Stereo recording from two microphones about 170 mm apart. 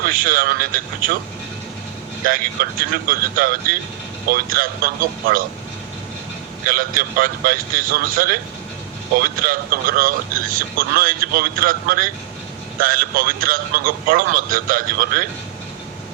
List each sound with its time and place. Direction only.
0.0 s speech: 55° right (ahead or behind)
2.2 s speech: 55° right (ahead or behind)
6.7 s speech: 55° right (ahead or behind)